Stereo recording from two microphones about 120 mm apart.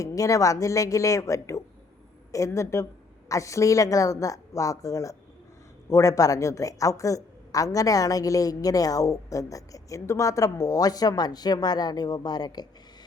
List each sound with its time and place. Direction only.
0.0 s a woman's voice: 25° left (ahead or behind)